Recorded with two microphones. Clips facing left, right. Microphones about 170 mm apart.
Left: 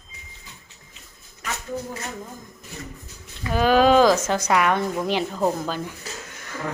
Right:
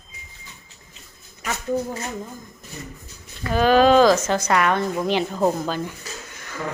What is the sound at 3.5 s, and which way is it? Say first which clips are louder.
A woman's voice: right 1 dB; 10° left (ahead or behind).